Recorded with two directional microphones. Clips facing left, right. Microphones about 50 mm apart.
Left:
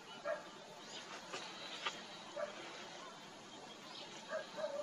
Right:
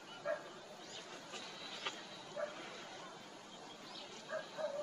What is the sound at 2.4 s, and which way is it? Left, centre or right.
Bow-wow, centre.